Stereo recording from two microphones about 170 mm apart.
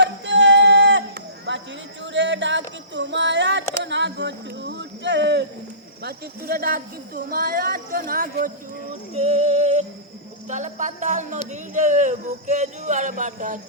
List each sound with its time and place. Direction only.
0.0 s a sound: 90° right
6.0 s speech: 65° right (ahead or behind)
9.1 s female singing: 40° right (ahead or behind)
10.5 s speech: 45° right (ahead or behind)